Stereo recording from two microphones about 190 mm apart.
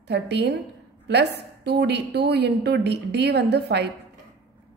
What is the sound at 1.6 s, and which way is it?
A woman's voice, 60° right (ahead or behind).